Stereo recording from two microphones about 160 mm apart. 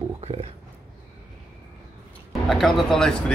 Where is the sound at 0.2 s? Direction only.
40° right (ahead or behind).